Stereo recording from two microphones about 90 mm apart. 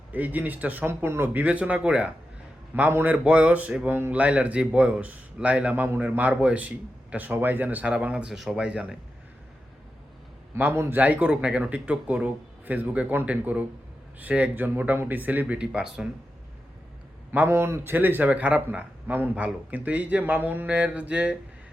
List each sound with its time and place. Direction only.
0.1 s a man's voice: 20° right (ahead or behind)
10.5 s a man's voice: 25° right (ahead or behind); by 16.0 s 10° right (ahead or behind)
17.3 s a man's voice: 25° right (ahead or behind)